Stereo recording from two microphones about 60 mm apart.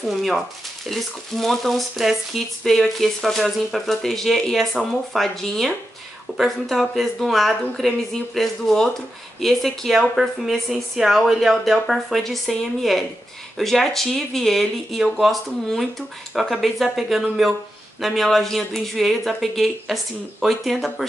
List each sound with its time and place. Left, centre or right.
0.0 s speech: centre